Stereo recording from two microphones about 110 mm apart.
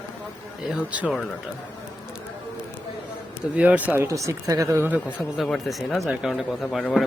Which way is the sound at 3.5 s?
10° right (ahead or behind).